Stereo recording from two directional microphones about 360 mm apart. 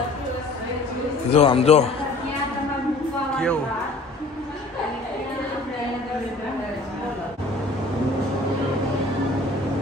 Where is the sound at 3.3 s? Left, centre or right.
Centre.